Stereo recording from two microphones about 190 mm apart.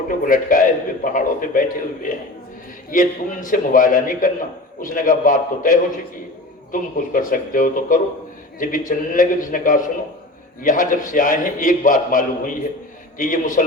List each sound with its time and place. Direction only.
0.1 s a man's voice: 45° left (ahead or behind)